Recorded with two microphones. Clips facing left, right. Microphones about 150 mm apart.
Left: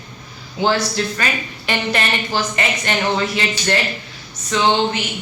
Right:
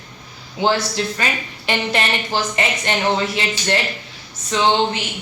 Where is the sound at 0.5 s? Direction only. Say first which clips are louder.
Left 1 dB; 25° right (ahead or behind).